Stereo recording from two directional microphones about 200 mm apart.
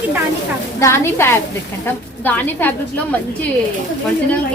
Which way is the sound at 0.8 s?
15° left (ahead or behind).